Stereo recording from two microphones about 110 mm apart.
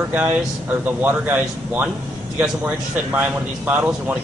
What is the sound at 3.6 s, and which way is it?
Speech, 15° right (ahead or behind).